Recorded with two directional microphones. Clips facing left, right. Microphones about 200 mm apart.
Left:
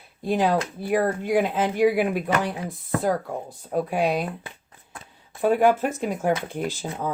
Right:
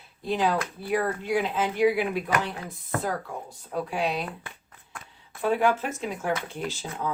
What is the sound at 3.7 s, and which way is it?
Speech, 50° left (ahead or behind).